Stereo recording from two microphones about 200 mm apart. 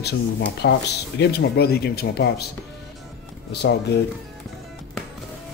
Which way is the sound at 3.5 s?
55° left (ahead or behind).